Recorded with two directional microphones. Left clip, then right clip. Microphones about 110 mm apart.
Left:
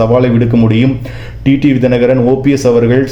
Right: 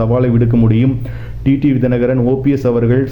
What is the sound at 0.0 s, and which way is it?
A man's voice, 30° left (ahead or behind).